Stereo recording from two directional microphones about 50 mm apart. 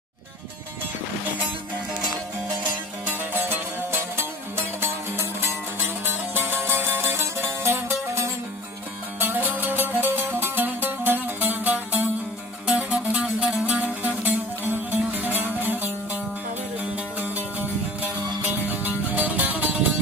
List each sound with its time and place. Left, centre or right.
3.3 s music: right
9.2 s music: right
12.6 s music: centre
13.7 s music: right
17.2 s music: right